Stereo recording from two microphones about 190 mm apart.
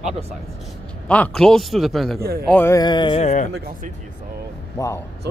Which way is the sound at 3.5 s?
55° right (ahead or behind).